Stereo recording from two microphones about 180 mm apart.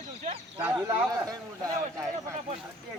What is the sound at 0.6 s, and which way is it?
Speech, 15° right (ahead or behind).